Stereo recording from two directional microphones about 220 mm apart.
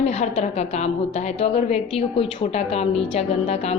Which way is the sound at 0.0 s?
30° left (ahead or behind).